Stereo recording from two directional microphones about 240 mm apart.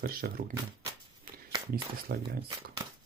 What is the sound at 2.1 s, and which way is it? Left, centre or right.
Speech, right.